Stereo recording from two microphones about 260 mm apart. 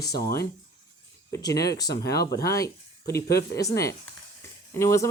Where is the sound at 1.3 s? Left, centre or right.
Centre.